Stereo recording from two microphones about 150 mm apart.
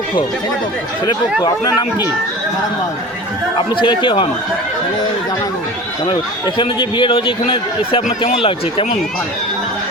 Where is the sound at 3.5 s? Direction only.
35° left (ahead or behind).